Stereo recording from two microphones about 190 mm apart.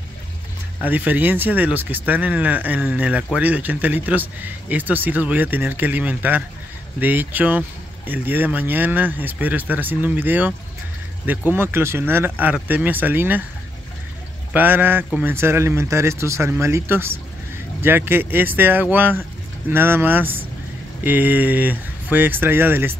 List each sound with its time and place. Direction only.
0.7 s speech: 10° right (ahead or behind)
11.5 s speech: 10° right (ahead or behind)
14.5 s speech: 10° right (ahead or behind)